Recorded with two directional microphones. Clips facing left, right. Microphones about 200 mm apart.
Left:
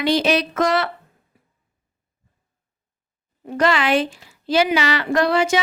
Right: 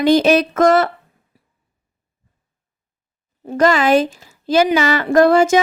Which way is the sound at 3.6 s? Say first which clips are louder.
Right 5 dB; 45° right (ahead or behind).